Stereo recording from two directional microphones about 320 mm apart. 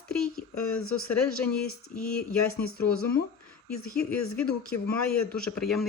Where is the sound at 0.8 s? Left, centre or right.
Left.